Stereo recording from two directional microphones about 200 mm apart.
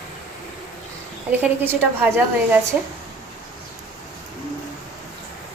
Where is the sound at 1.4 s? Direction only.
10° right (ahead or behind).